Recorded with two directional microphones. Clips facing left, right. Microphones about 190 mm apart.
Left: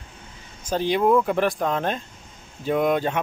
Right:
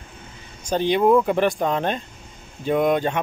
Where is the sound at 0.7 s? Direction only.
5° left (ahead or behind).